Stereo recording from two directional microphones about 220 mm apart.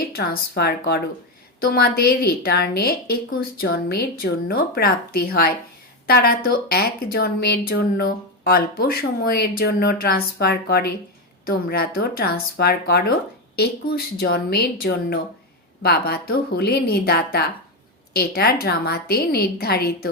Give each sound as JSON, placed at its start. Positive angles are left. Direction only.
{"t": 0.0, "sound": "speech", "side_deg": 45}